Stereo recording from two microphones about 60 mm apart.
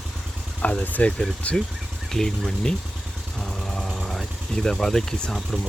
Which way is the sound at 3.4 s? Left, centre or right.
Centre.